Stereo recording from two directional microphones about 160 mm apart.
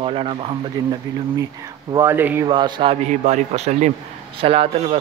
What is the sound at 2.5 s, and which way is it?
Speech, 25° right (ahead or behind).